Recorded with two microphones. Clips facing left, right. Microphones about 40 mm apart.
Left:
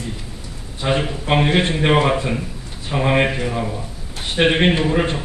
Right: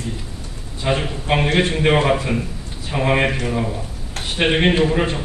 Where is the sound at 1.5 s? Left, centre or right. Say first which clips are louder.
Even; left.